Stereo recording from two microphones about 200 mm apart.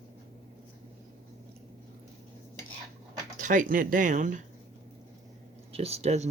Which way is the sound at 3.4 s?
40° right (ahead or behind).